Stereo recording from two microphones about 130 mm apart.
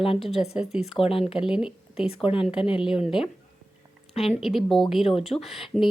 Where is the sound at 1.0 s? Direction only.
45° left (ahead or behind).